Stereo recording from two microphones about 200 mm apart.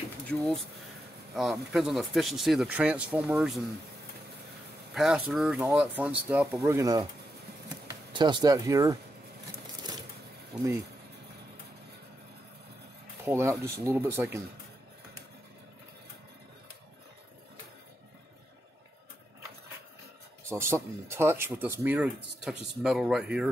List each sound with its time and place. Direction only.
1.3 s speech: centre (ahead or behind)
4.9 s speech: centre (ahead or behind)
13.2 s speech: 10° right (ahead or behind)
20.4 s speech: 15° right (ahead or behind)